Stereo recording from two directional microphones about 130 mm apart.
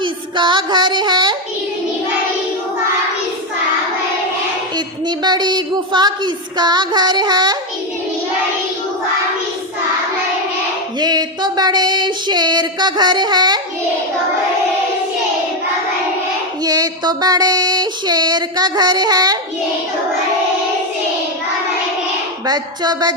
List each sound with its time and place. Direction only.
0.0 s child singing: 35° right (ahead or behind)
5.0 s child singing: 35° right (ahead or behind)
11.0 s child singing: 30° right (ahead or behind)
16.6 s child singing: 30° right (ahead or behind)
22.4 s child singing: 30° right (ahead or behind)